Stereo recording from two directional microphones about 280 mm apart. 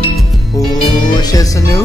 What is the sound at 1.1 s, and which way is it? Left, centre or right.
Music, centre.